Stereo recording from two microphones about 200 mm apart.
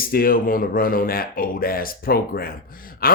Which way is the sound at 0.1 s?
45° left (ahead or behind).